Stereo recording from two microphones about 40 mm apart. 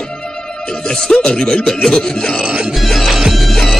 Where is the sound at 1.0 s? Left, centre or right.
Centre.